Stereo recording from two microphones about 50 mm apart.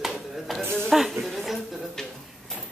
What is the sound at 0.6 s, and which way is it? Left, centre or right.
Speech, right.